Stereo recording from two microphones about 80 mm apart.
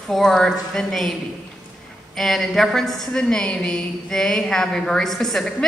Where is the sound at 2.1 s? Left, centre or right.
Centre.